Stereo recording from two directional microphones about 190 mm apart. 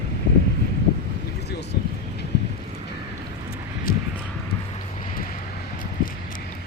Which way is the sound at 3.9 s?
50° left (ahead or behind).